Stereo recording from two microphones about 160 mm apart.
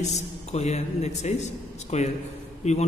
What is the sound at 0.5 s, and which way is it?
A man's voice, 45° left (ahead or behind).